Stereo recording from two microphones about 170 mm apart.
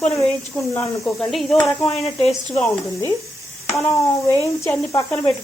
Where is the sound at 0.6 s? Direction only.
15° left (ahead or behind).